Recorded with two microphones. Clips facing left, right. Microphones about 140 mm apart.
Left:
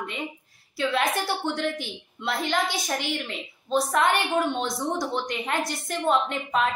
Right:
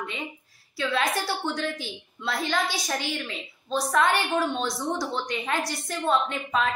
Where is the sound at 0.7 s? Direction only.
20° left (ahead or behind).